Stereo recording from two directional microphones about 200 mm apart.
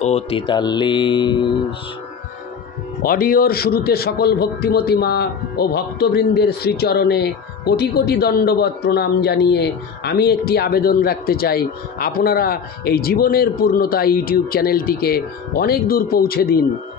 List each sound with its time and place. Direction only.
0.0 s mantra: 30° left (ahead or behind)
3.0 s a man's voice: 45° left (ahead or behind)